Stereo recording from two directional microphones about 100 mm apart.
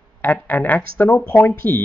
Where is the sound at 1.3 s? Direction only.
25° left (ahead or behind).